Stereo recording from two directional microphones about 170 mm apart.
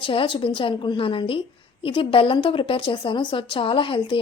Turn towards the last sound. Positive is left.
turn(degrees=30)  # may be behind; listen again after turning